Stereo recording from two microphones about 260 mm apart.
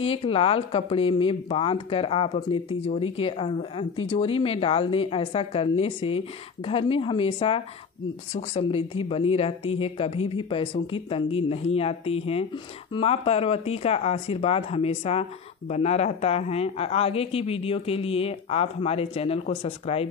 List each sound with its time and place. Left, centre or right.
0.0 s speech: left